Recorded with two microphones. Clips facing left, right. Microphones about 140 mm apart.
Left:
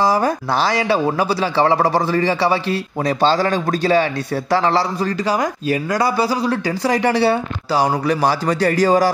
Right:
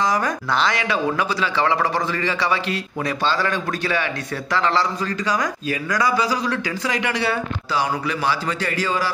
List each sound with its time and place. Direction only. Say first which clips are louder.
0.0 s speech: left 5 dB; 30° left (ahead or behind)